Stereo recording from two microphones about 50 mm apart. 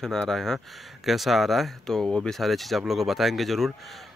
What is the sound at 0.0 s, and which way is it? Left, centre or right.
Speech, centre.